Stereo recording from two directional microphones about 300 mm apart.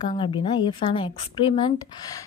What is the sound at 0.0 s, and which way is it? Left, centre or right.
A woman's voice, centre.